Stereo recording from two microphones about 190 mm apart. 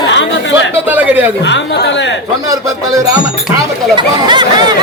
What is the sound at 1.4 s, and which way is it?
Speech, 70° left (ahead or behind).